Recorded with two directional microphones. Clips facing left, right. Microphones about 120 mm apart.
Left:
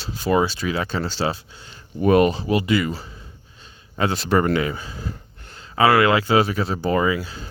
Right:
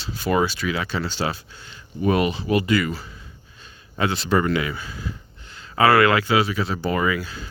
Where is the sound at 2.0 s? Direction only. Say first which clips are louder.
Left 5 dB; 45° left (ahead or behind).